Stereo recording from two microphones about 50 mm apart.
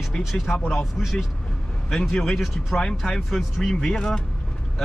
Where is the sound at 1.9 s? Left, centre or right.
Centre.